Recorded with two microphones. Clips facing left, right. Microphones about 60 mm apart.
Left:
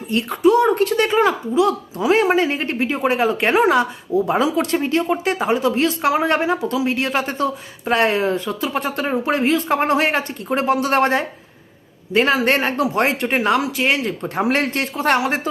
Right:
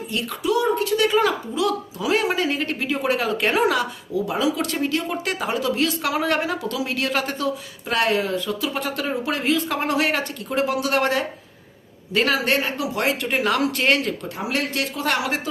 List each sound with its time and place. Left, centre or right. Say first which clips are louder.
0.1 s speech: left 8 dB; left
12.5 s speech: left 5 dB; left
13.7 s speech: left 1 dB; centre
14.5 s speech: left 4 dB; left